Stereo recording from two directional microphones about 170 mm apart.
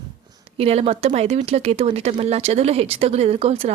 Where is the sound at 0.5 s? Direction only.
35° right (ahead or behind).